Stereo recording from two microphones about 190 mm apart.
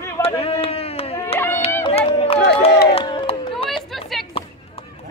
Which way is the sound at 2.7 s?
60° left (ahead or behind).